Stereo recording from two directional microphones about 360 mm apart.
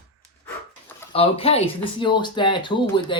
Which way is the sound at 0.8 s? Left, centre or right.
Centre.